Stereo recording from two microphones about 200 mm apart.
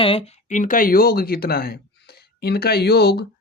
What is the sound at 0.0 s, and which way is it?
Speech, 30° left (ahead or behind).